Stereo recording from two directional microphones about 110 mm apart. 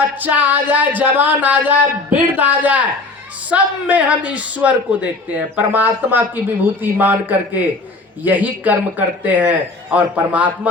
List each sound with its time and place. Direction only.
0.2 s a man's voice: 15° right (ahead or behind)